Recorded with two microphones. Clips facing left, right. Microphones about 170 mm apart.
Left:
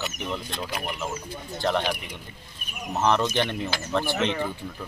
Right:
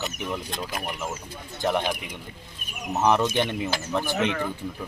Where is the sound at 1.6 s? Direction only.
15° right (ahead or behind).